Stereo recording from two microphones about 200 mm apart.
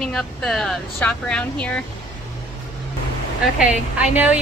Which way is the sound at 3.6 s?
5° right (ahead or behind).